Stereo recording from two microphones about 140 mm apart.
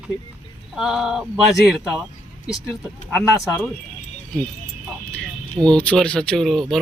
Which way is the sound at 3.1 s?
Centre (ahead or behind).